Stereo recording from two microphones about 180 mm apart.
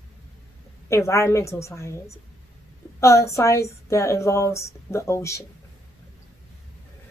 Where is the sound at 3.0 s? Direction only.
15° left (ahead or behind).